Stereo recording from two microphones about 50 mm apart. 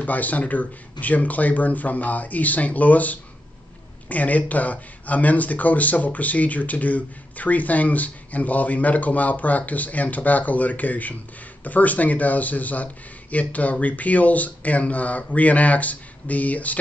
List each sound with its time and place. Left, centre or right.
0.0 s speech: left